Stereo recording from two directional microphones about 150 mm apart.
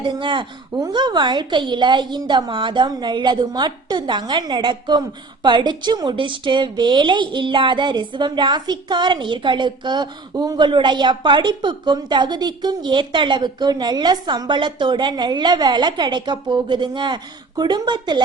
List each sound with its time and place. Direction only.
0.0 s a woman's voice: 35° right (ahead or behind)